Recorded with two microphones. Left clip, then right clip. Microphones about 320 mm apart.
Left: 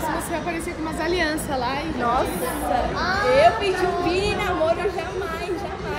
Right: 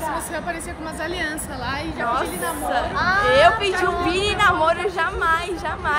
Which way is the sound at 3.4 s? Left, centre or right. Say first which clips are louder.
Right 2 dB; centre.